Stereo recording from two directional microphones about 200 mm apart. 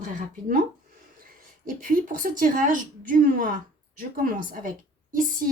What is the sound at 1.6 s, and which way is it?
A woman's voice, 40° right (ahead or behind).